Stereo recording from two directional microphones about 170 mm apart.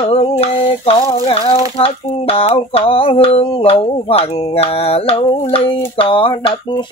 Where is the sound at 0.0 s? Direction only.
35° left (ahead or behind).